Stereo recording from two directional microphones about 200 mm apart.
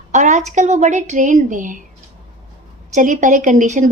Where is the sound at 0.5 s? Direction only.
35° right (ahead or behind).